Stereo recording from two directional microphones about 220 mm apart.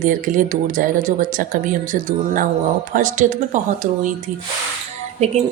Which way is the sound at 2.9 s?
35° right (ahead or behind).